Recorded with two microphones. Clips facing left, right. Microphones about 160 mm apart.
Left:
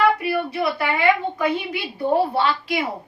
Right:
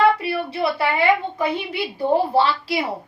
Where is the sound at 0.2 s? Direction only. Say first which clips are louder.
Even; 30° right (ahead or behind).